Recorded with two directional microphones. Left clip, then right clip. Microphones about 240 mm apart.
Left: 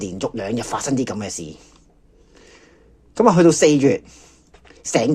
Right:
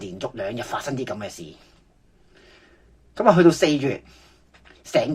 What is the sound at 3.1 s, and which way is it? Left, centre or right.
Speech, left.